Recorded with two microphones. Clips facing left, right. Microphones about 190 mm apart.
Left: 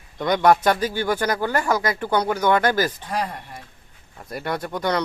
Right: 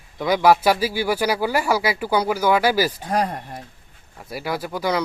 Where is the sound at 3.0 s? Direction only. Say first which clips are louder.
Right 4 dB; 45° right (ahead or behind).